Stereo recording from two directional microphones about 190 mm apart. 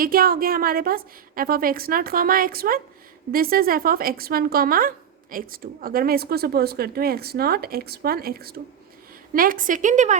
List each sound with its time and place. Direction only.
0.0 s speech: 50° right (ahead or behind)